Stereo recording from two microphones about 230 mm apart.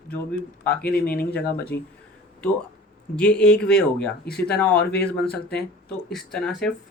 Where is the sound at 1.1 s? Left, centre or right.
Left.